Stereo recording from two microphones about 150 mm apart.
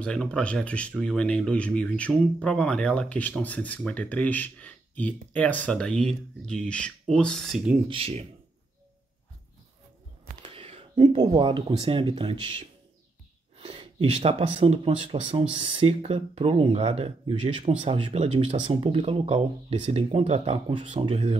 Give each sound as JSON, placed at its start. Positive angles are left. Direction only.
{"t": 0.0, "sound": "speech", "side_deg": 5}
{"t": 7.9, "sound": "speech", "side_deg": -40}
{"t": 10.4, "sound": "speech", "side_deg": -40}